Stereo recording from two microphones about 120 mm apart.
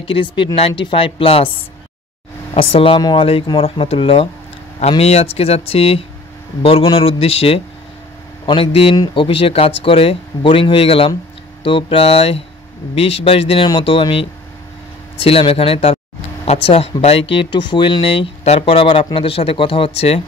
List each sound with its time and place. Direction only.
0.0 s speech: 45° left (ahead or behind)
2.5 s speech: 55° left (ahead or behind)
15.2 s speech: 55° left (ahead or behind)